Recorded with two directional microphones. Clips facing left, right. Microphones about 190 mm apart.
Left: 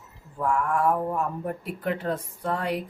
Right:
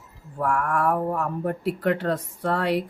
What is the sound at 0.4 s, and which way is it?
Speech, 65° right (ahead or behind).